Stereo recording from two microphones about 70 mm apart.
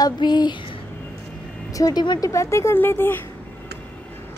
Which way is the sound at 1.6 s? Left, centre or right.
Left.